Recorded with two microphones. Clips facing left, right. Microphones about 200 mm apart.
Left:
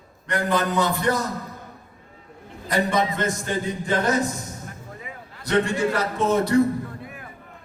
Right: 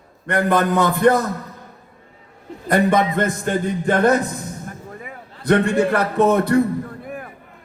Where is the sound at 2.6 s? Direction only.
55° right (ahead or behind).